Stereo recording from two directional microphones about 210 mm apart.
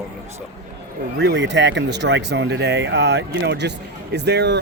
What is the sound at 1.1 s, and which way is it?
Speech, 55° right (ahead or behind).